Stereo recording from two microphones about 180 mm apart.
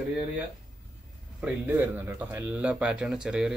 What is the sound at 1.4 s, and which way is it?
Speech, 10° right (ahead or behind).